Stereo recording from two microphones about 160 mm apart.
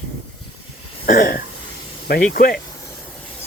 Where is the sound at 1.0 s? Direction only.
60° left (ahead or behind).